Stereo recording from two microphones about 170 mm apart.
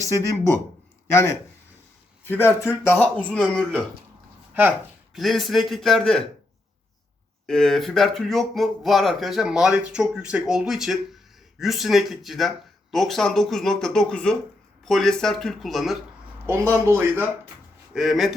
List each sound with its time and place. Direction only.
0.0 s speech: 15° left (ahead or behind)
5.1 s speech: centre (ahead or behind)
7.4 s speech: 5° left (ahead or behind)
16.7 s speech: 15° right (ahead or behind)
17.9 s speech: centre (ahead or behind)